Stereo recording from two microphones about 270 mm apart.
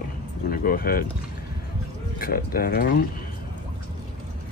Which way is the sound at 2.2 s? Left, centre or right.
Left.